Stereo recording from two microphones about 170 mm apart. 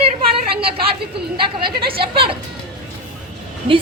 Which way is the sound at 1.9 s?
30° right (ahead or behind).